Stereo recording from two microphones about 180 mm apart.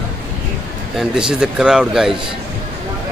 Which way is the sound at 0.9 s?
5° right (ahead or behind).